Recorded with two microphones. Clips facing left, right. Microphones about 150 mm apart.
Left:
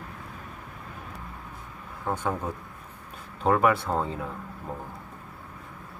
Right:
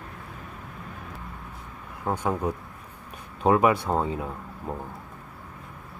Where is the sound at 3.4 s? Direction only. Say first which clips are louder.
Right 2 dB; 15° right (ahead or behind).